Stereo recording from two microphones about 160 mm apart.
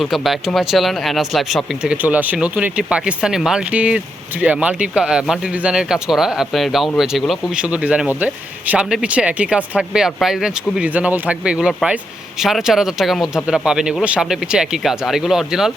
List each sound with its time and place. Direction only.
0.0 s speech: centre (ahead or behind)